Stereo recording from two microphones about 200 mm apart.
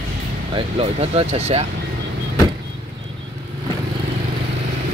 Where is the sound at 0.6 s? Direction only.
30° right (ahead or behind).